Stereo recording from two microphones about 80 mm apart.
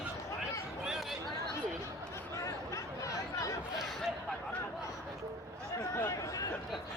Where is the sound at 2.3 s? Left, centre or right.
Left.